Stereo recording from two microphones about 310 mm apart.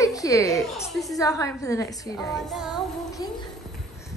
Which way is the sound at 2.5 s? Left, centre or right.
Centre.